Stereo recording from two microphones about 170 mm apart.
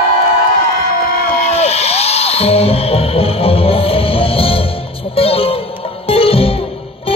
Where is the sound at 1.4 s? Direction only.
40° left (ahead or behind).